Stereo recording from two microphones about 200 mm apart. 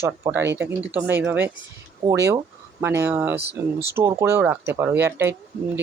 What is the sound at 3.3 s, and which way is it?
Speech, 30° right (ahead or behind).